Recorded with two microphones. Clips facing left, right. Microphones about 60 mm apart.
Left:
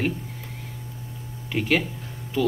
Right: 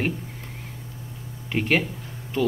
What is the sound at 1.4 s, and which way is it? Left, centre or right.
Speech, centre.